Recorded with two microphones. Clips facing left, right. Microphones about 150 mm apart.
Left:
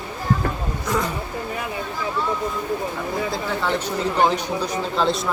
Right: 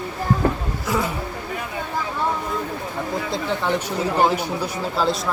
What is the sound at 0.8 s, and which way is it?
Speech, centre (ahead or behind).